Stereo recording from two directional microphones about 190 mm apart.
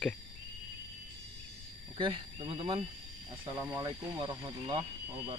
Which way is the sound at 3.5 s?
15° right (ahead or behind).